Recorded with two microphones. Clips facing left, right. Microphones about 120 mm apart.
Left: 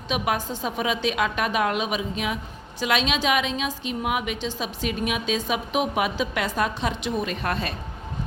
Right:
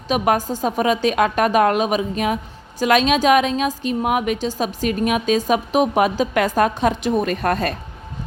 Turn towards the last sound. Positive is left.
turn(degrees=-45)  # may be behind; listen again after turning